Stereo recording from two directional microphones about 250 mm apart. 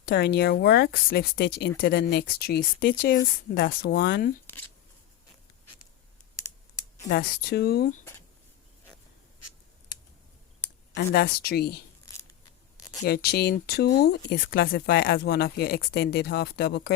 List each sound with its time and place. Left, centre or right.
0.0 s speech: left
4.4 s shuffling cards: centre
5.6 s a sound: left
7.1 s speech: left
10.9 s speech: left
13.1 s speech: left